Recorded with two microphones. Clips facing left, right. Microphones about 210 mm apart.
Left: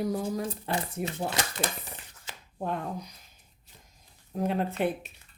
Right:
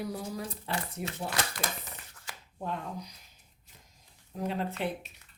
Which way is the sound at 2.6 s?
55° left (ahead or behind).